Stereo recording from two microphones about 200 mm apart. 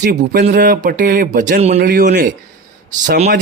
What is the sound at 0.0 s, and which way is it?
Speech, 45° right (ahead or behind).